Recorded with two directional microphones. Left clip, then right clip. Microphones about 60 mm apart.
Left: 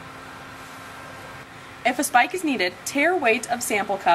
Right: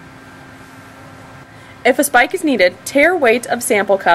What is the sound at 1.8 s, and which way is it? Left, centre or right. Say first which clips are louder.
Speech: right 7 dB; right.